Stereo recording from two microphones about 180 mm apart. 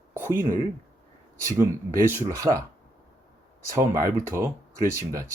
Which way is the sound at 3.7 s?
15° right (ahead or behind).